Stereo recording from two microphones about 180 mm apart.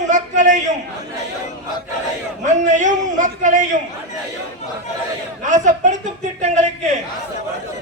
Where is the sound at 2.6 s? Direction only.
45° right (ahead or behind).